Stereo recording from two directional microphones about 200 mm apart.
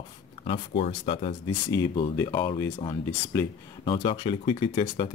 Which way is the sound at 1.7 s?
15° left (ahead or behind).